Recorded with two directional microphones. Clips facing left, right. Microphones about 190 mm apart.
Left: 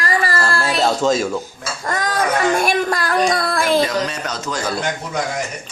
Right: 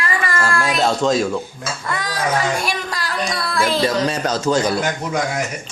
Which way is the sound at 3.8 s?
30° right (ahead or behind).